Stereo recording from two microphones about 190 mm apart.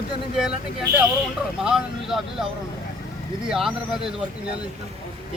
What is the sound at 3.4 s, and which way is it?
Speech, centre (ahead or behind).